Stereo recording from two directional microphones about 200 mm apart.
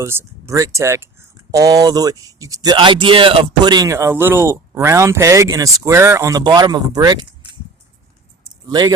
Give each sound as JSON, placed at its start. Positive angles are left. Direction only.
{"t": 0.0, "sound": "speech", "side_deg": -10}
{"t": 8.7, "sound": "speech", "side_deg": -20}